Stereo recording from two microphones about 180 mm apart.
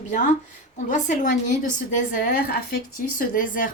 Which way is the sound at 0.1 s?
45° left (ahead or behind).